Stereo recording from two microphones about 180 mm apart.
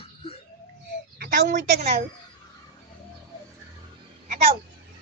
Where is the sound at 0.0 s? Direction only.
30° left (ahead or behind).